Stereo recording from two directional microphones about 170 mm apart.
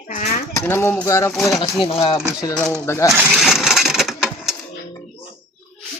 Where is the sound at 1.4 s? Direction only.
Centre (ahead or behind).